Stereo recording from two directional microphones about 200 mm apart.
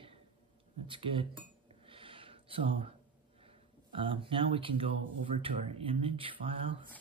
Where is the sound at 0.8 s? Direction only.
25° right (ahead or behind).